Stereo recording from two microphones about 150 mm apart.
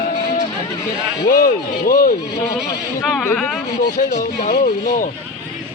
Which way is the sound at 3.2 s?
15° left (ahead or behind).